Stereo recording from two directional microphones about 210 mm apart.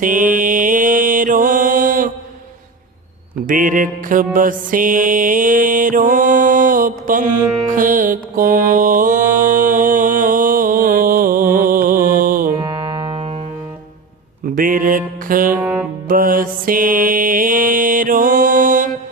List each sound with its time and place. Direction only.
0.0 s mantra: 40° right (ahead or behind)
3.4 s music: 40° right (ahead or behind)
7.4 s music: 15° right (ahead or behind)
7.7 s mantra: 40° right (ahead or behind)
12.6 s music: 20° right (ahead or behind)
14.5 s music: 40° right (ahead or behind)
15.6 s music: 5° right (ahead or behind)
16.0 s music: 40° right (ahead or behind)